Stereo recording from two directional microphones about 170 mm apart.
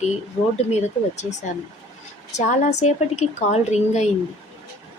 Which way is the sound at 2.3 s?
45° left (ahead or behind).